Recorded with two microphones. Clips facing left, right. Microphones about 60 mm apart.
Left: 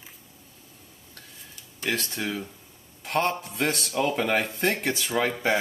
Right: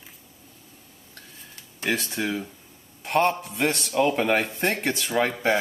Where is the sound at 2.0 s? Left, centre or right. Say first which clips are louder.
Right 3 dB; centre.